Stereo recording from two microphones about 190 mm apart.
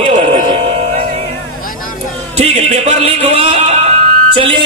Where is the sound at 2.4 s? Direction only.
30° right (ahead or behind).